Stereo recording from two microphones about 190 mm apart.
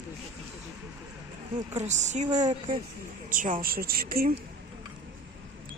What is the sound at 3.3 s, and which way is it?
A woman's voice, 45° right (ahead or behind).